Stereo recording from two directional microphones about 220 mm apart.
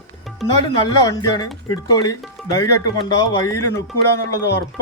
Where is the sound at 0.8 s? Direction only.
20° left (ahead or behind).